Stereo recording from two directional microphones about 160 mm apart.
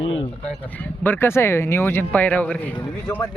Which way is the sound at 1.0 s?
15° left (ahead or behind).